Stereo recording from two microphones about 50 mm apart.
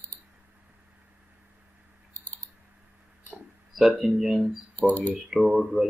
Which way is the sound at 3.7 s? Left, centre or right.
Centre.